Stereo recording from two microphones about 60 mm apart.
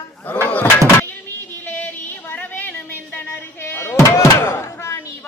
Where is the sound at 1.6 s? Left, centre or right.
Left.